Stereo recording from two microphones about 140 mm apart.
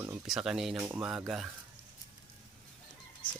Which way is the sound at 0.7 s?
15° right (ahead or behind).